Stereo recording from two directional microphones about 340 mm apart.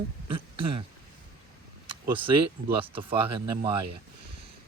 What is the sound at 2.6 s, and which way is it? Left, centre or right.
Speech, right.